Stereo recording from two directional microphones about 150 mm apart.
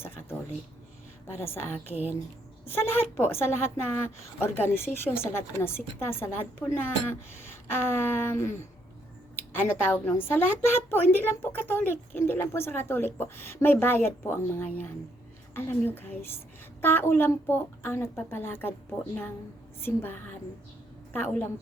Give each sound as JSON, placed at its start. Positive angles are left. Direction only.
{"t": 0.2, "sound": "a sound", "side_deg": 15}
{"t": 1.3, "sound": "a woman's voice", "side_deg": 15}
{"t": 1.9, "sound": "speech", "side_deg": -10}
{"t": 2.6, "sound": "a woman's voice", "side_deg": 15}
{"t": 19.8, "sound": "a woman's voice", "side_deg": 15}